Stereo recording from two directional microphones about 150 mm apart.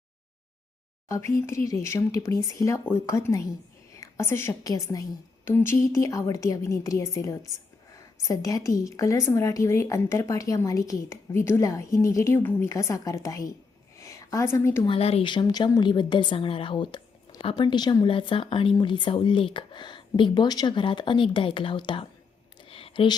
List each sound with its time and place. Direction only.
1.0 s a woman's voice: 20° left (ahead or behind)
14.8 s speech: 40° left (ahead or behind)
22.6 s a sound: 40° left (ahead or behind)